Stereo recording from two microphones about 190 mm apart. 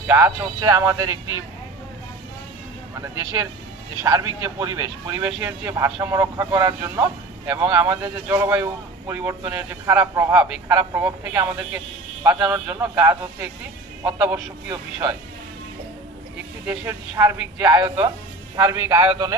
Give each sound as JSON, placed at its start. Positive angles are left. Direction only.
{"t": 0.0, "sound": "speech", "side_deg": -10}
{"t": 3.0, "sound": "speech", "side_deg": -15}
{"t": 16.6, "sound": "speech", "side_deg": -10}